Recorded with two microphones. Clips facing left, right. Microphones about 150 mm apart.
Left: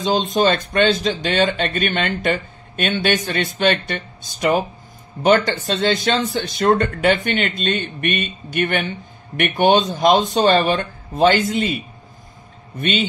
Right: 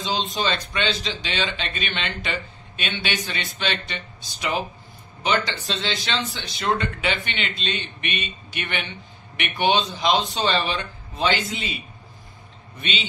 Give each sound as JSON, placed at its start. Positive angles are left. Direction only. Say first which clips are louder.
{"t": 0.0, "sound": "speech", "louder": "left 8 dB", "side_deg": 50}